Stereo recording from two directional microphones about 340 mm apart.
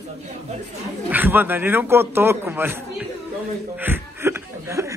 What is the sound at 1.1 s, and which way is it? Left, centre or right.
A man's voice, centre.